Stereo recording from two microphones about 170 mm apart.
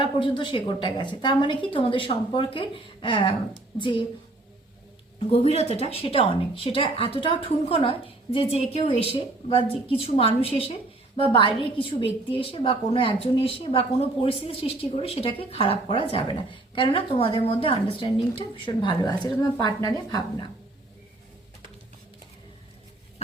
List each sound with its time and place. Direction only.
0.0 s a woman's voice: 30° left (ahead or behind)
5.5 s a woman's voice: 40° left (ahead or behind); by 20.2 s 20° left (ahead or behind)